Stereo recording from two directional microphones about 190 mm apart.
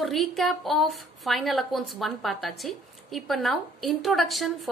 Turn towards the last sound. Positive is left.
turn(degrees=0)  # may be behind; listen again after turning